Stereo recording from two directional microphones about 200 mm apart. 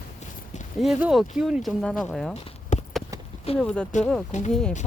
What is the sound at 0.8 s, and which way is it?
Speech, 5° right (ahead or behind).